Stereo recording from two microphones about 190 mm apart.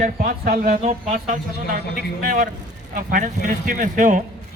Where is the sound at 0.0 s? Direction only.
45° right (ahead or behind).